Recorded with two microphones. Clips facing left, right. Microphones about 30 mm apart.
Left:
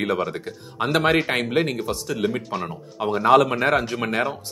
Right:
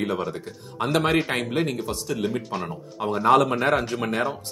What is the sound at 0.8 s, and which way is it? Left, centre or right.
Speech, centre.